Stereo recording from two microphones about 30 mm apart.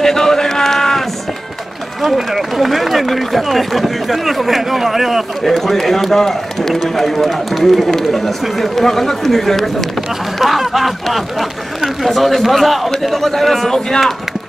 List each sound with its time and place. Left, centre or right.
0.0 s a sound: centre
2.0 s a man's voice: centre
5.4 s a man's voice: centre
10.4 s a man's voice: centre